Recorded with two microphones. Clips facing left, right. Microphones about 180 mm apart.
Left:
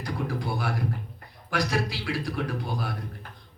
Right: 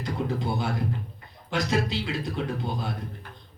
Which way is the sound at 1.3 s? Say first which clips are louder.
Right 1 dB; 20° right (ahead or behind).